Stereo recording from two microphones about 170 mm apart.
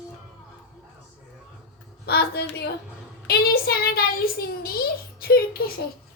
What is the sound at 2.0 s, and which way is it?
A woman's voice, 70° left (ahead or behind).